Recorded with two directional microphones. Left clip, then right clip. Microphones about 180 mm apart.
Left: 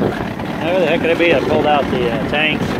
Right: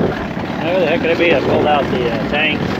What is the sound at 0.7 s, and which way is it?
Speech, 10° left (ahead or behind).